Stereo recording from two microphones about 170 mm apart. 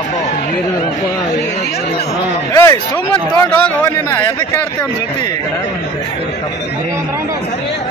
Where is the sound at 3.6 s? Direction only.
15° left (ahead or behind).